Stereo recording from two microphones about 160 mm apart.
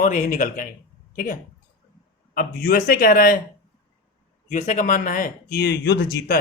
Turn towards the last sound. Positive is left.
turn(degrees=85)